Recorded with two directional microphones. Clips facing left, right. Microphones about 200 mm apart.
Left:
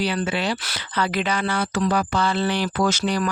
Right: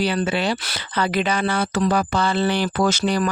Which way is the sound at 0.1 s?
30° right (ahead or behind).